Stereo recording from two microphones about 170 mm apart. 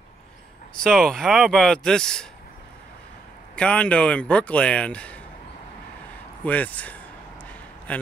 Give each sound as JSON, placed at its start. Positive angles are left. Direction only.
{"t": 0.7, "sound": "speech", "side_deg": 5}
{"t": 3.5, "sound": "speech", "side_deg": 5}
{"t": 6.4, "sound": "speech", "side_deg": 10}